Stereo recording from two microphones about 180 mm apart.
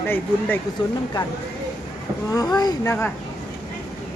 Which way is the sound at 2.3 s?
20° left (ahead or behind).